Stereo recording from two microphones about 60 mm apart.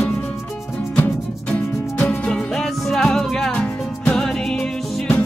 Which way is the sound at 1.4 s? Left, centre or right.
Left.